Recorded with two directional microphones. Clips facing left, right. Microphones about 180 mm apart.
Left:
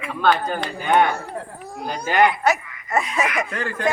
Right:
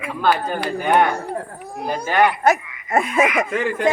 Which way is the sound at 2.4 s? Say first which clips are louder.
Right 3 dB; 50° right (ahead or behind).